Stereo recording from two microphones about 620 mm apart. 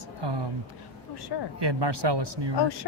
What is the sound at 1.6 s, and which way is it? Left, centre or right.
Speech, right.